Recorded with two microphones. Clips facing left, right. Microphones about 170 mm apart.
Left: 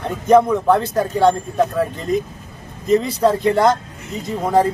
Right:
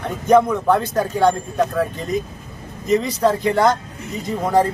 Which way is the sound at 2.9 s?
Centre (ahead or behind).